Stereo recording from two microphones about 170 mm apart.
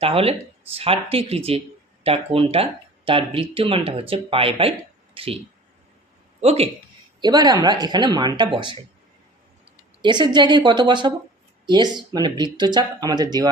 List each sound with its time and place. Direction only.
0.0 s speech: 35° right (ahead or behind)
6.4 s speech: 35° right (ahead or behind)
7.2 s speech: 25° right (ahead or behind)
10.0 s speech: 25° right (ahead or behind)